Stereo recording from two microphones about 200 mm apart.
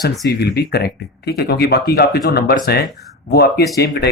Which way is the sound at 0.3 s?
55° left (ahead or behind).